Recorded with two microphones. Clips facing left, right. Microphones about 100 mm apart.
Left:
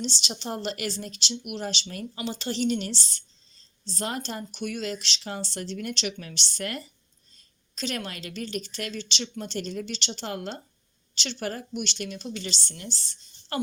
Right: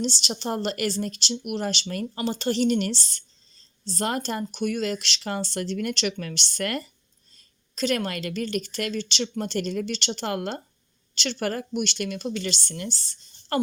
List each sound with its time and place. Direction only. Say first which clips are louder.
0.0 s a woman's voice: right 5 dB; 45° right (ahead or behind); by 6.8 s 65° right (ahead or behind)
7.8 s a woman's voice: right 7 dB; 50° right (ahead or behind)